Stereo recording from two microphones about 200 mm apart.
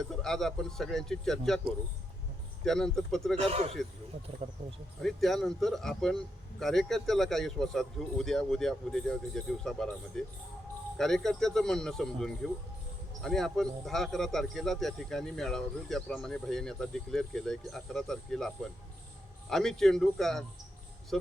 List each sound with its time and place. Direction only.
0.0 s a man's voice: centre (ahead or behind)
2.6 s a man's voice: 5° left (ahead or behind)
3.4 s a man's voice: 30° right (ahead or behind)
5.0 s a man's voice: centre (ahead or behind)